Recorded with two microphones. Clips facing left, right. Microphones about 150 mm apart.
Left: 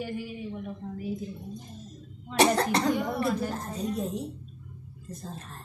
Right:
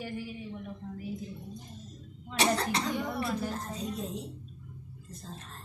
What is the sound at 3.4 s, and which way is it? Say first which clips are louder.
Speech: left 4 dB; 55° left (ahead or behind).